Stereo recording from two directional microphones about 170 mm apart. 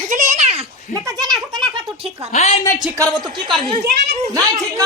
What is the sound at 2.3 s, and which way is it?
Speech, 45° left (ahead or behind).